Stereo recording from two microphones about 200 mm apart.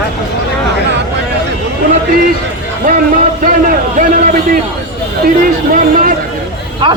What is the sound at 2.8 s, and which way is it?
A man's voice, 45° right (ahead or behind).